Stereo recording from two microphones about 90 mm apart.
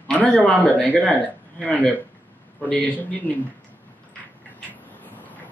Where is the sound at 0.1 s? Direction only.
15° left (ahead or behind).